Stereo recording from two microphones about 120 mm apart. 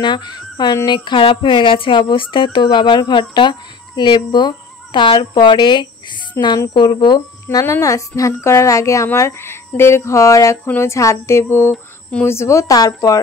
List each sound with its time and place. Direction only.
0.0 s speech: 40° left (ahead or behind)
7.5 s speech: 25° left (ahead or behind)
11.7 s a sound: 10° left (ahead or behind)
12.3 s speech: 25° left (ahead or behind)